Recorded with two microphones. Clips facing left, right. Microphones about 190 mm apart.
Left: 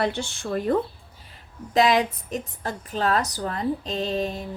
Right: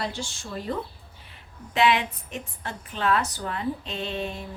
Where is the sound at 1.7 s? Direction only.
40° left (ahead or behind).